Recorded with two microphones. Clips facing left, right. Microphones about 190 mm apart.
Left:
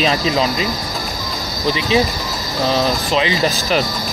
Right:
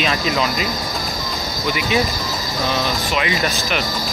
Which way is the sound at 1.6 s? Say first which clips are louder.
Left 4 dB; 30° left (ahead or behind).